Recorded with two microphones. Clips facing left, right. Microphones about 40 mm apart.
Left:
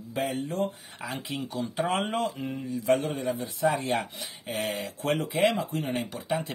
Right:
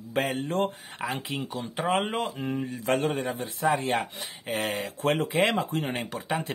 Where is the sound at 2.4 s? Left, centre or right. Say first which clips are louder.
Left 1 dB; right.